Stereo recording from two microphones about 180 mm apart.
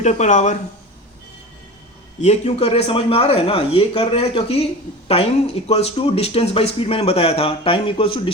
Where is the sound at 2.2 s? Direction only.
35° left (ahead or behind).